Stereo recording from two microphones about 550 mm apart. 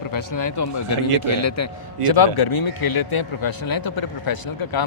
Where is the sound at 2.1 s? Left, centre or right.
Left.